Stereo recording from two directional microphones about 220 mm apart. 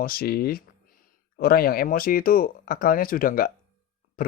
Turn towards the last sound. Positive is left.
turn(degrees=40)  # may be behind; listen again after turning